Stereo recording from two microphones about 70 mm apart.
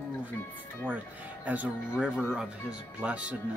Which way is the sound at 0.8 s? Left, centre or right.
Right.